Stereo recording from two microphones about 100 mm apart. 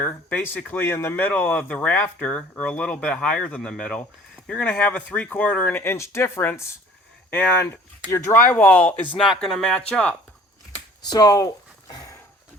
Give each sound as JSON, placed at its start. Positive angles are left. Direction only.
{"t": 0.0, "sound": "speech", "side_deg": 20}
{"t": 8.0, "sound": "speech", "side_deg": 20}
{"t": 9.4, "sound": "speech", "side_deg": 5}
{"t": 11.1, "sound": "speech", "side_deg": 40}